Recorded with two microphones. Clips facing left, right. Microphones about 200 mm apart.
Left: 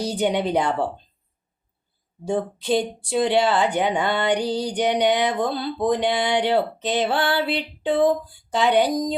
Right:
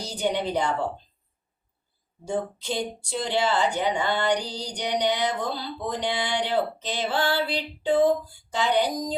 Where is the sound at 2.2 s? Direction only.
65° left (ahead or behind).